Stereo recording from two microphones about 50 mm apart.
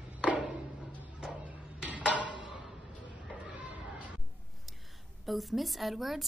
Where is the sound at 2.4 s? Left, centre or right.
Centre.